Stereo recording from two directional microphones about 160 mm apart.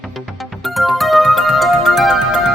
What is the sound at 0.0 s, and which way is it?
Music, centre (ahead or behind).